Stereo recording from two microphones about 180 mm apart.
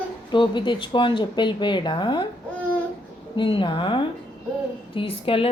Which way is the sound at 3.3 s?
30° left (ahead or behind).